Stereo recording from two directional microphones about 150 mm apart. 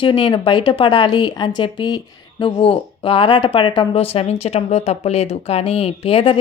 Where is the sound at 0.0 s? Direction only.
35° left (ahead or behind).